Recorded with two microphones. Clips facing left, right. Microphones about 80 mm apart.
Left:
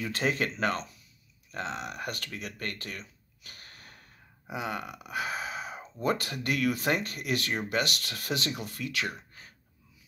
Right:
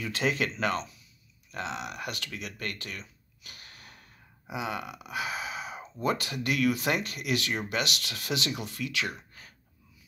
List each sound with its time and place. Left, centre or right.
0.0 s speech: left